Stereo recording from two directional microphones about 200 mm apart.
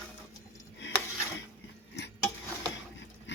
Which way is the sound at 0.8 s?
60° left (ahead or behind).